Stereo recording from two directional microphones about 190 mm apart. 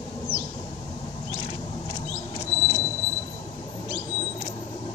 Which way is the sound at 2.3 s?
25° left (ahead or behind).